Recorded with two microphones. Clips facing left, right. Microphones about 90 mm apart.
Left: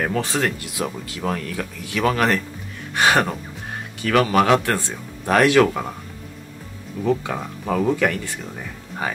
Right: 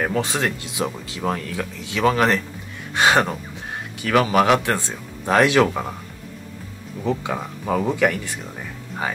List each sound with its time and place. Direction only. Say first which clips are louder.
0.0 s speech: even; 15° right (ahead or behind)
7.0 s speech: left 2 dB; centre (ahead or behind)
7.8 s speech: left 1 dB; 15° right (ahead or behind)